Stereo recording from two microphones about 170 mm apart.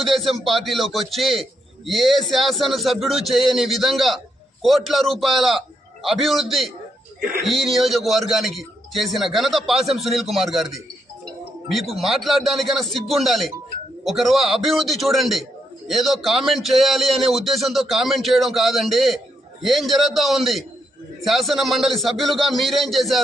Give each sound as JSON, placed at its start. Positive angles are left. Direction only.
{"t": 0.0, "sound": "a man's voice", "side_deg": 0}
{"t": 11.9, "sound": "a man's voice", "side_deg": 0}